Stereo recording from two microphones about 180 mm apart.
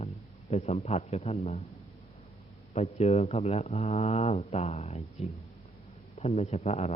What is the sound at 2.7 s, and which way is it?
Speech, 35° left (ahead or behind).